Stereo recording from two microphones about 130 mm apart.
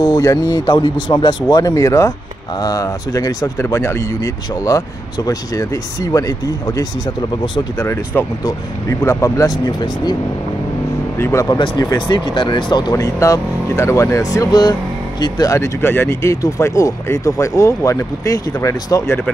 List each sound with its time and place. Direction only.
0.2 s speech: 30° left (ahead or behind)
11.1 s speech: 20° left (ahead or behind)
11.5 s speech: 40° left (ahead or behind)